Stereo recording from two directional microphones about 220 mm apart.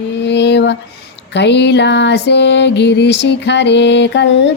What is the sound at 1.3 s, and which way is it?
Music, 50° left (ahead or behind).